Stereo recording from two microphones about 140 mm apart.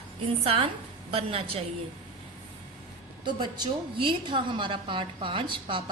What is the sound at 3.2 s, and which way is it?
A woman's voice, 35° right (ahead or behind).